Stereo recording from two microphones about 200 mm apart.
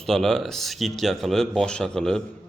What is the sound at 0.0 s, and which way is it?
Speech, centre (ahead or behind).